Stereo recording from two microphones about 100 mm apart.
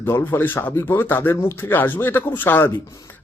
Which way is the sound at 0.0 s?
20° left (ahead or behind).